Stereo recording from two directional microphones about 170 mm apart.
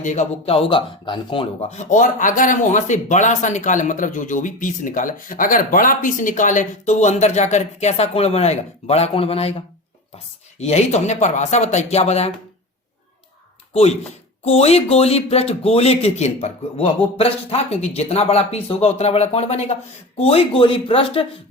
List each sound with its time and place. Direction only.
0.0 s speech: 45° left (ahead or behind); by 1.5 s 30° left (ahead or behind)
1.7 s speech: 45° left (ahead or behind)
14.4 s speech: 35° left (ahead or behind)